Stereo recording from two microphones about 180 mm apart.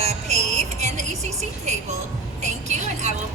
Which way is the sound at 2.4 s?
40° right (ahead or behind).